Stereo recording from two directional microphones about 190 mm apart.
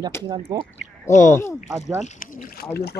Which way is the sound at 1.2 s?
15° left (ahead or behind).